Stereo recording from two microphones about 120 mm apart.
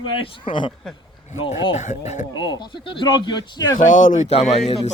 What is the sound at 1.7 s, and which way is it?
Speech, 75° left (ahead or behind).